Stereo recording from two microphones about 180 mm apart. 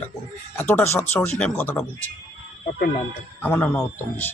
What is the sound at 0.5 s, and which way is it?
Speech, 10° left (ahead or behind).